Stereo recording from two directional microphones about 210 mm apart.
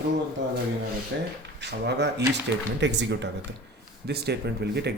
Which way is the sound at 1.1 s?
55° right (ahead or behind).